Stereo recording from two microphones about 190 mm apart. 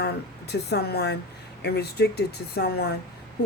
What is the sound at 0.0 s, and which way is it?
Speech, 60° left (ahead or behind).